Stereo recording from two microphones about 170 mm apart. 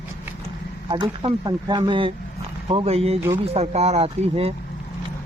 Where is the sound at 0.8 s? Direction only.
30° right (ahead or behind).